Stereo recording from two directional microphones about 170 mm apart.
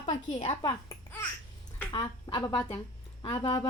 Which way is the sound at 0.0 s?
40° left (ahead or behind).